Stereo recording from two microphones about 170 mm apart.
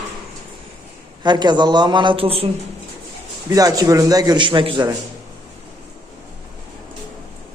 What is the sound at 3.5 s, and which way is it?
A man's voice, 20° right (ahead or behind).